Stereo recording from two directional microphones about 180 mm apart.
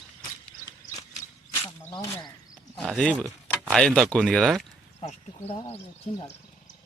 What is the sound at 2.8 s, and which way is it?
Speech, 5° left (ahead or behind).